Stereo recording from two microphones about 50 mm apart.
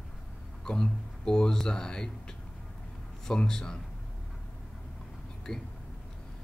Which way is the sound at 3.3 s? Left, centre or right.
Centre.